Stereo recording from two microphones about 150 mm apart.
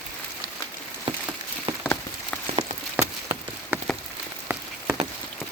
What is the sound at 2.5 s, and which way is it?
Rain on surface, 45° right (ahead or behind).